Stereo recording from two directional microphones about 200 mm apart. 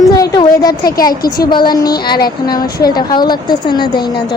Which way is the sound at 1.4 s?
20° left (ahead or behind).